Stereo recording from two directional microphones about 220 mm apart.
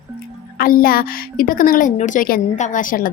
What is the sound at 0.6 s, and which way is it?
A woman's voice, 40° left (ahead or behind).